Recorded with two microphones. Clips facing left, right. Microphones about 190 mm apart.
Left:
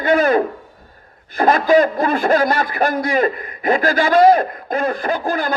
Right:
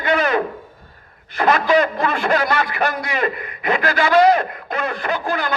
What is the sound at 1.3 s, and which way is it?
A man's voice, 35° left (ahead or behind).